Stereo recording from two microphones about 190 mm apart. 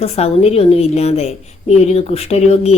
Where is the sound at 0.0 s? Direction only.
30° left (ahead or behind).